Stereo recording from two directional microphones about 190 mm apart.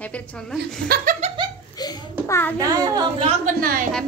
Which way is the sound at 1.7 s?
20° left (ahead or behind).